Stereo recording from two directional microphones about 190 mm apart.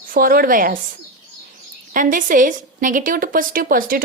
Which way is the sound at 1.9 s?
45° right (ahead or behind).